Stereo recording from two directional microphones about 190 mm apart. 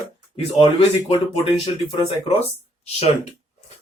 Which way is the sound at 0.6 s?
30° left (ahead or behind).